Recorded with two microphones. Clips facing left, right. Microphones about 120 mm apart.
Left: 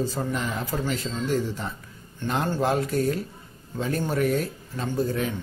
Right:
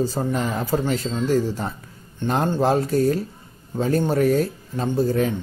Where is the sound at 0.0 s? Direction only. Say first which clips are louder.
Right 5 dB; 35° right (ahead or behind).